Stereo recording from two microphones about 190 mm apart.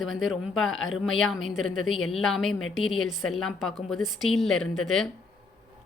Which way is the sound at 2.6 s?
90° left.